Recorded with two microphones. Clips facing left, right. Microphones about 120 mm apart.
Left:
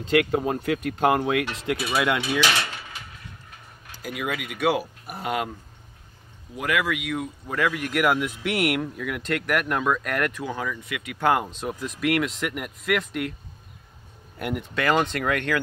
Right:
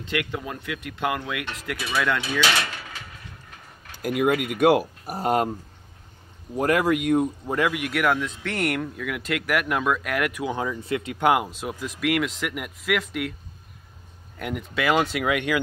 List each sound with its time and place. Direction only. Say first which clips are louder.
0.0 s speech: left 7 dB; 35° left (ahead or behind)
2.0 s speech: even; 15° left (ahead or behind)
3.9 s speech: right 8 dB; 50° right (ahead or behind)
6.5 s speech: right 5 dB; 40° right (ahead or behind)
7.4 s speech: right 1 dB; 20° right (ahead or behind)
7.7 s speech: even; 5° right (ahead or behind)
8.0 s speech: left 2 dB; 10° left (ahead or behind); by 11.1 s 30° right (ahead or behind)
11.1 s speech: even; 15° right (ahead or behind)
14.4 s speech: even; centre (ahead or behind)